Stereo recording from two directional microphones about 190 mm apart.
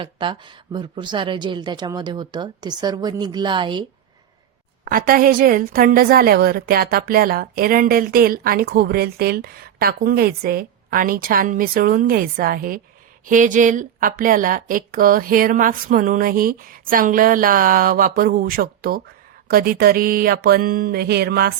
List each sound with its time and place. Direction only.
0.0 s a woman's voice: 25° right (ahead or behind)
4.9 s a woman's voice: 50° right (ahead or behind)